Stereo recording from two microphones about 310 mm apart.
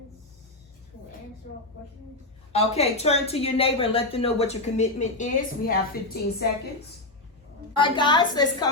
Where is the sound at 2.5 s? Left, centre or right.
Centre.